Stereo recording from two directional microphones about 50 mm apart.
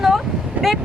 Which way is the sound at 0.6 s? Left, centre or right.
Right.